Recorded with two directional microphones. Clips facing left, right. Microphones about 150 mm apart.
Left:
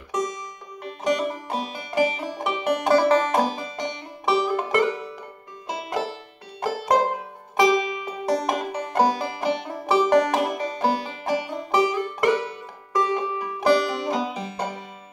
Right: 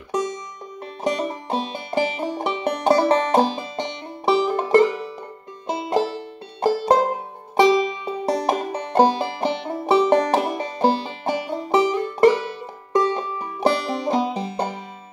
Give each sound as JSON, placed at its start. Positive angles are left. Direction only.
{"t": 0.1, "sound": "music", "side_deg": -30}
{"t": 7.5, "sound": "banjo", "side_deg": -30}
{"t": 12.9, "sound": "music", "side_deg": -30}